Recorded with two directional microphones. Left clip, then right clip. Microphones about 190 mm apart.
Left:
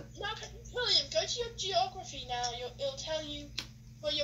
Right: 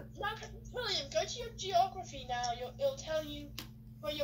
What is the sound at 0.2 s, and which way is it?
A woman's voice, 25° right (ahead or behind).